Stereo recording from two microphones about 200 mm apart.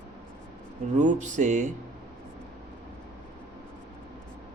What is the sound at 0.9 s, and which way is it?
Speech, 40° right (ahead or behind).